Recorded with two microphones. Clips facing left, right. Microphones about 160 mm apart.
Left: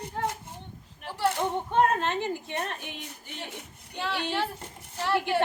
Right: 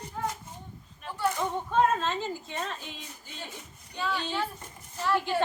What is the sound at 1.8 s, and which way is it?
A woman's voice, 65° left (ahead or behind).